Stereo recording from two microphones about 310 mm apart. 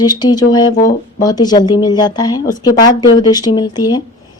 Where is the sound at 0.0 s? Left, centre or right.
Centre.